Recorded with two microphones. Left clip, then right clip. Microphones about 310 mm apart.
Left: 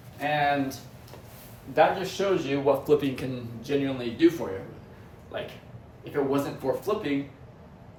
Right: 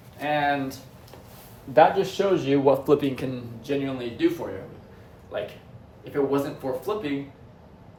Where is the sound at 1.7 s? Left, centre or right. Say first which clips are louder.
Right 4 dB; right.